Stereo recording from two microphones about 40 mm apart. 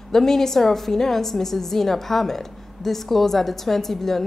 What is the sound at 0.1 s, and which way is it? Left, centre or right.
A woman's voice, centre.